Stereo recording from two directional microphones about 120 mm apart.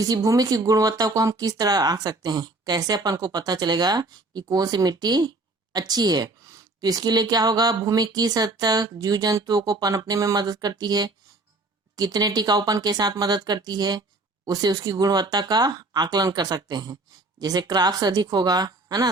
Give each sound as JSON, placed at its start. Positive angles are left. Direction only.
{"t": 0.0, "sound": "a woman's voice", "side_deg": -30}